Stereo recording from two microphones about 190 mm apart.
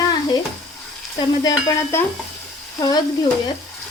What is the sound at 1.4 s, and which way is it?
Speech, 20° left (ahead or behind).